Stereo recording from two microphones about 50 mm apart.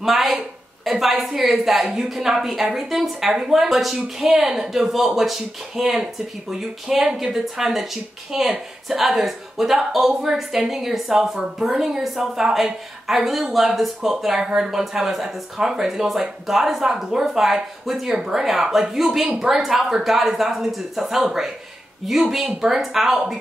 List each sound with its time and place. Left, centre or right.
0.0 s a woman's voice: centre